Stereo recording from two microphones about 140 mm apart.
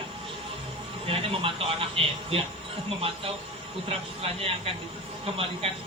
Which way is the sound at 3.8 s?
45° right (ahead or behind).